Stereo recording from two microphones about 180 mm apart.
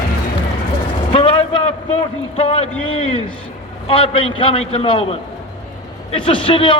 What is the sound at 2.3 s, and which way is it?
A man's voice, 30° left (ahead or behind).